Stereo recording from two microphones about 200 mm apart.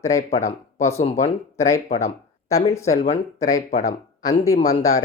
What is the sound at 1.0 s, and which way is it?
Speech, 35° left (ahead or behind).